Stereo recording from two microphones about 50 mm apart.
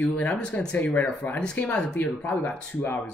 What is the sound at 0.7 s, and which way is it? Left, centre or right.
Speech, left.